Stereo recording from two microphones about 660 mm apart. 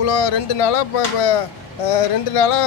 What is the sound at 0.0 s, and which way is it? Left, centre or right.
Speech, left.